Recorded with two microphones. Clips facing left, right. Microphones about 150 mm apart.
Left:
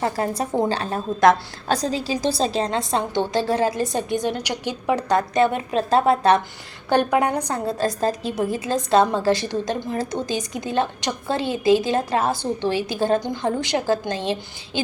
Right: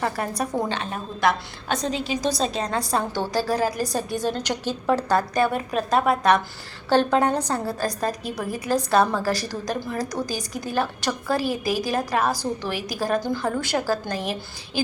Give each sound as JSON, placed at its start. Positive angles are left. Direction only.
{"t": 0.0, "sound": "a woman's voice", "side_deg": 25}
{"t": 6.9, "sound": "a woman's voice", "side_deg": 15}